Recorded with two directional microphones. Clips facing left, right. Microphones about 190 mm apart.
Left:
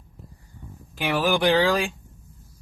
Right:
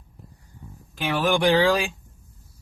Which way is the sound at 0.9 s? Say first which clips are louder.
Even; 10° left (ahead or behind).